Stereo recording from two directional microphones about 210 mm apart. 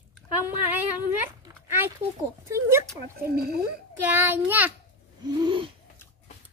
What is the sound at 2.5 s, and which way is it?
Speech, 15° right (ahead or behind).